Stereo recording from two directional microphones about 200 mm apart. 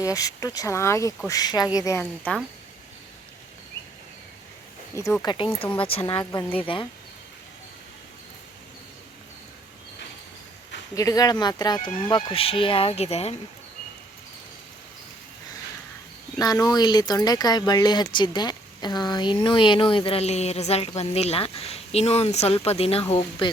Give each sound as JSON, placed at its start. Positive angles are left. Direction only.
{"t": 0.0, "sound": "speech", "side_deg": 15}
{"t": 5.2, "sound": "speech", "side_deg": 20}
{"t": 10.9, "sound": "speech", "side_deg": 20}
{"t": 16.4, "sound": "speech", "side_deg": 20}